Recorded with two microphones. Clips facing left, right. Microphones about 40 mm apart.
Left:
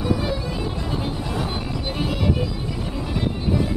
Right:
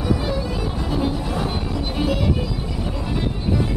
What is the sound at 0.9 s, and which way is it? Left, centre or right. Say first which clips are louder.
Music: right 5 dB; centre.